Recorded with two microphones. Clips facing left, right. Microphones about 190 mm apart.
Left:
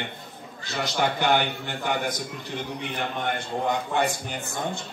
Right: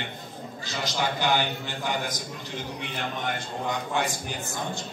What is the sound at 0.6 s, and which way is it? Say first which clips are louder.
A man's voice: left 3 dB; 60° left (ahead or behind).